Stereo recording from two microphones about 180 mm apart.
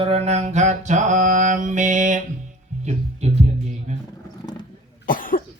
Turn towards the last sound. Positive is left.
turn(degrees=50)  # may be behind; listen again after turning